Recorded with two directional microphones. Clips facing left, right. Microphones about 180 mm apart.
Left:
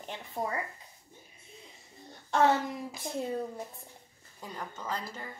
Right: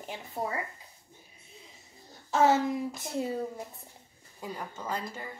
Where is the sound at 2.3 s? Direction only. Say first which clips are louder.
Right 1 dB; 5° right (ahead or behind).